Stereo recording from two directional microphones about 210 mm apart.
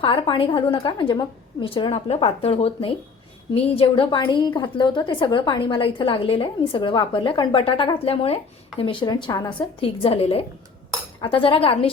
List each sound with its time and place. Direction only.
0.0 s a woman's voice: 25° left (ahead or behind)